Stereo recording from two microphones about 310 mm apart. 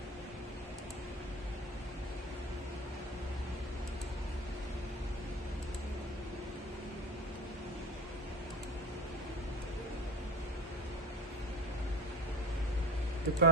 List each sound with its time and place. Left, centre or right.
13.3 s speech: right